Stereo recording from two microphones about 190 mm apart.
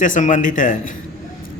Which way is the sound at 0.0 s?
45° left (ahead or behind).